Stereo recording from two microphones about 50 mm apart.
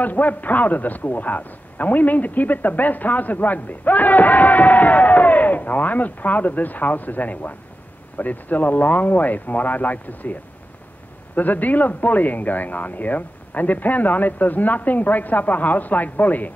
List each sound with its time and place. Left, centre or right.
0.0 s a man's voice: left
11.3 s a man's voice: left